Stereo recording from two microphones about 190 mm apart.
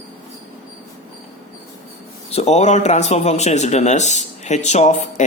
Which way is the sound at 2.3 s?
35° left (ahead or behind).